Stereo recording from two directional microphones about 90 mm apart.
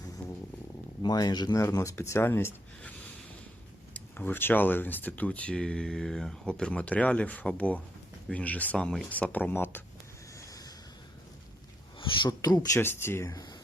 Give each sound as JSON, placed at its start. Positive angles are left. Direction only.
{"t": 1.0, "sound": "speech", "side_deg": 50}
{"t": 1.5, "sound": "speech", "side_deg": 35}
{"t": 3.9, "sound": "speech", "side_deg": 20}
{"t": 10.3, "sound": "a sound", "side_deg": 40}
{"t": 11.9, "sound": "speech", "side_deg": 70}
{"t": 12.4, "sound": "speech", "side_deg": 45}
{"t": 12.8, "sound": "speech", "side_deg": 25}
{"t": 13.3, "sound": "speech", "side_deg": 45}